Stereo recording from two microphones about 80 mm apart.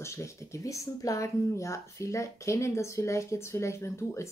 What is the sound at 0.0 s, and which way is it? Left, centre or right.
Speech, left.